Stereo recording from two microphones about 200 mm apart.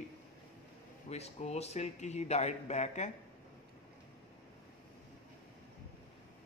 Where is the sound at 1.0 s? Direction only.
30° left (ahead or behind).